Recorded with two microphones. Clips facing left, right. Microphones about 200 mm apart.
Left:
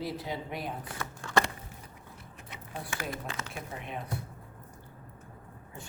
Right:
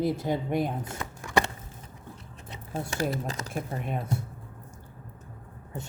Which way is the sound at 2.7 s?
35° right (ahead or behind).